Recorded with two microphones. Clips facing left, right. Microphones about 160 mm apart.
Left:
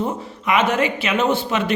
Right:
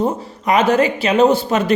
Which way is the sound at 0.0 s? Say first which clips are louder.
Right 5 dB; 35° right (ahead or behind).